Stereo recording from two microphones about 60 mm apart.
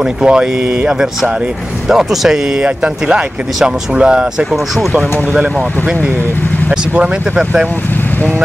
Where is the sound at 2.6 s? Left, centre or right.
Centre.